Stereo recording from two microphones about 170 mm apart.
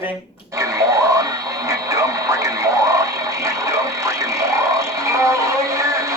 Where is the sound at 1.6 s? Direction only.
15° right (ahead or behind).